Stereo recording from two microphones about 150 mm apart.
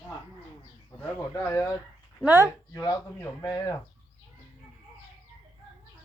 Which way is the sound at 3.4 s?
25° left (ahead or behind).